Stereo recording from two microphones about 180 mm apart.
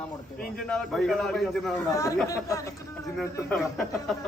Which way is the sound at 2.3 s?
20° left (ahead or behind).